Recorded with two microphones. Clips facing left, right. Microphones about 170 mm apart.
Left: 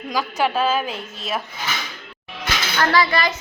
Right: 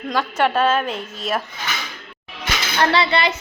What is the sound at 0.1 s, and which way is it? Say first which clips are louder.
A woman's voice: right 2 dB; centre (ahead or behind).